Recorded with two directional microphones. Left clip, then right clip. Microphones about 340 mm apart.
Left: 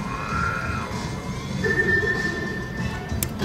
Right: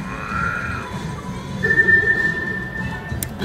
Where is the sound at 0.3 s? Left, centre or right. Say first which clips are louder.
Right 4 dB; left.